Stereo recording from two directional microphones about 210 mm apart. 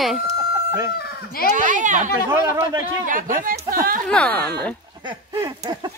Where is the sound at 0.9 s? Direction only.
45° left (ahead or behind).